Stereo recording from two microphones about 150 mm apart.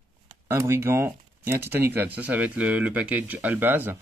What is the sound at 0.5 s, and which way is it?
Speech, 15° right (ahead or behind).